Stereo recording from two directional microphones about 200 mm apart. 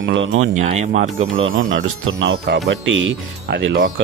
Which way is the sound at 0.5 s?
35° right (ahead or behind).